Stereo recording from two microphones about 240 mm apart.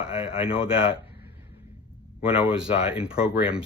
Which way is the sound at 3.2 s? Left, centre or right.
Centre.